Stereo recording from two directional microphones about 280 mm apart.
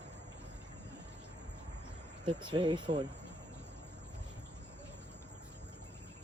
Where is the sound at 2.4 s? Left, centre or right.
Centre.